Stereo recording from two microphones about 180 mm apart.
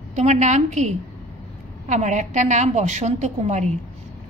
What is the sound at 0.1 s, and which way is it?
A woman's voice, 40° right (ahead or behind).